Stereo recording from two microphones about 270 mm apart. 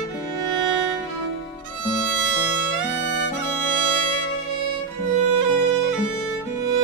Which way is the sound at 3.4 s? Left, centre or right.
Left.